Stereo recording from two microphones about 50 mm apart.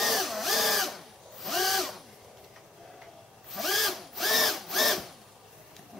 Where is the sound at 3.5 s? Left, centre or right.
Centre.